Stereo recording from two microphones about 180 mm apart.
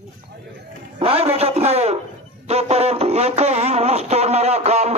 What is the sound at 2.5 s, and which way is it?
Music, 35° right (ahead or behind).